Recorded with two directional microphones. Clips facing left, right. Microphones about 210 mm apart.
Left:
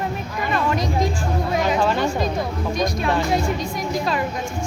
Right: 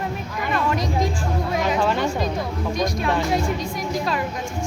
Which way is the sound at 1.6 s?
30° left (ahead or behind).